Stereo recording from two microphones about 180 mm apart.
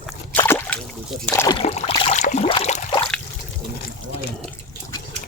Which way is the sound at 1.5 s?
35° left (ahead or behind).